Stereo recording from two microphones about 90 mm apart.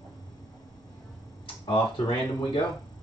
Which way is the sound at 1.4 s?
65° left (ahead or behind).